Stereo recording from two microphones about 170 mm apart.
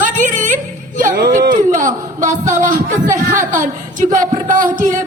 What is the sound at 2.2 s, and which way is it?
Music, 50° right (ahead or behind).